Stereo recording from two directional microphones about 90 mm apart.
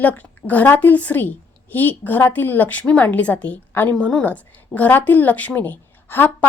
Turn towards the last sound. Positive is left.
turn(degrees=20)  # may be behind; listen again after turning